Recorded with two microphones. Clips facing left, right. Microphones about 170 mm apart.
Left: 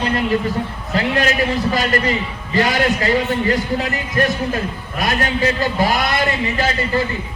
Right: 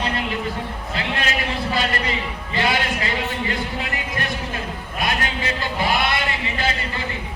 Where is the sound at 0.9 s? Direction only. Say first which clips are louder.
Left 9 dB; 45° left (ahead or behind).